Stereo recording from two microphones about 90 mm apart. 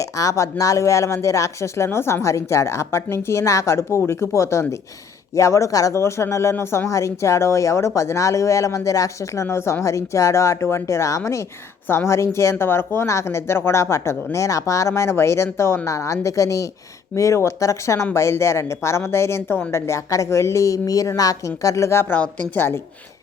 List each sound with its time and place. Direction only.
0.0 s speech: 40° left (ahead or behind)
22.2 s a woman's voice: 20° left (ahead or behind)